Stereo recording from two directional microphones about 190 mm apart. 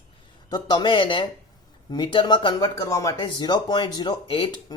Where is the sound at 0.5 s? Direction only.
25° left (ahead or behind).